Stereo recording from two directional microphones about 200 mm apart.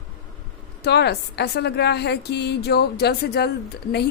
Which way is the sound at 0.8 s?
55° left (ahead or behind).